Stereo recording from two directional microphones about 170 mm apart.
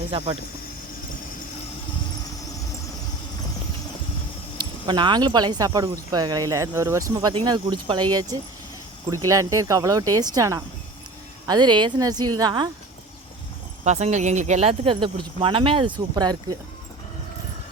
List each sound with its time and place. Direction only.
0.1 s speech: 35° right (ahead or behind)
4.5 s speech: 25° right (ahead or behind)
13.8 s speech: 40° right (ahead or behind); by 16.6 s 25° right (ahead or behind)